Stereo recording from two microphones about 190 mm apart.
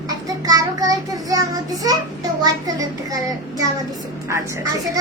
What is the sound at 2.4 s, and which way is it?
A child's voice, 20° right (ahead or behind).